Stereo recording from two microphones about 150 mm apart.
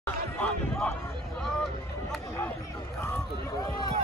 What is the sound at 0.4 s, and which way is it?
Speech, centre (ahead or behind).